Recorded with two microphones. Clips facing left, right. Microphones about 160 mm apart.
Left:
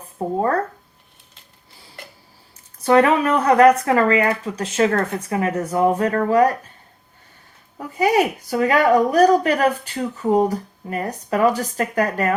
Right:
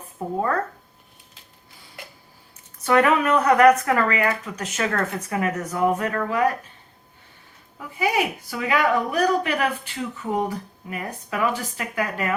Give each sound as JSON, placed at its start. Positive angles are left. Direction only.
{"t": 0.2, "sound": "a woman's voice", "side_deg": 35}
{"t": 2.8, "sound": "a woman's voice", "side_deg": 30}
{"t": 7.8, "sound": "a woman's voice", "side_deg": 40}